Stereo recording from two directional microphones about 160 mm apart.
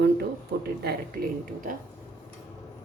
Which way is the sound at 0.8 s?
60° right (ahead or behind).